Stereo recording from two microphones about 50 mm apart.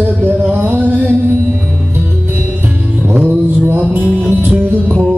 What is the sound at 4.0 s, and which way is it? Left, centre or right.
Music, left.